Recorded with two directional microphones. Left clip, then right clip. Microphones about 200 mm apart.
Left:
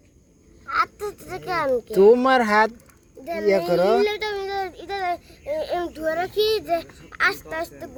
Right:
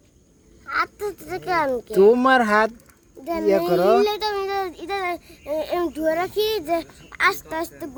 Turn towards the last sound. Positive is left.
turn(degrees=-60)  # may be behind; listen again after turning